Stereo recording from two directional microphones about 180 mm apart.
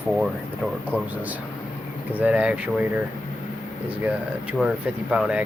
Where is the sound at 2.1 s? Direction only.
10° right (ahead or behind).